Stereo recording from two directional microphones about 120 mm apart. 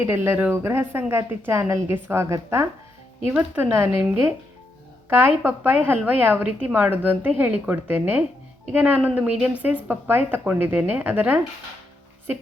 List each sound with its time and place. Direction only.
0.1 s a woman's voice: 20° right (ahead or behind)